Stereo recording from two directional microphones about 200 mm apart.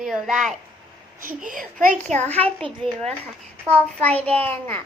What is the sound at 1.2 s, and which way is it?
A child's voice, 40° right (ahead or behind).